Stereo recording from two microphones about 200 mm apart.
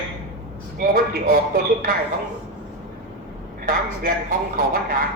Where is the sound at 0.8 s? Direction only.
45° right (ahead or behind).